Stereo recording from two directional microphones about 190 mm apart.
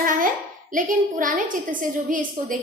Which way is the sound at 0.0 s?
45° right (ahead or behind).